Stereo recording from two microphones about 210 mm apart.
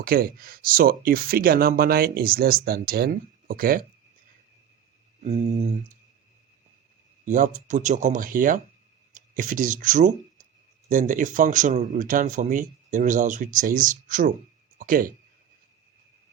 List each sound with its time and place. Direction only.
0.0 s speech: 45° right (ahead or behind)
5.2 s speech: 35° right (ahead or behind)
7.3 s speech: 35° right (ahead or behind)